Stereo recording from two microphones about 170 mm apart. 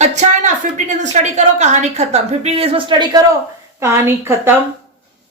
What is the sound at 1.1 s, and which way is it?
A woman's voice, 45° right (ahead or behind).